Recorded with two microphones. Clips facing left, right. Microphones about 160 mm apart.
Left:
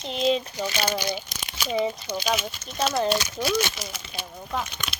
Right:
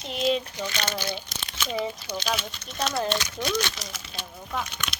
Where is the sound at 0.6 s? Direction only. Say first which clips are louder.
Left 4 dB; 10° left (ahead or behind).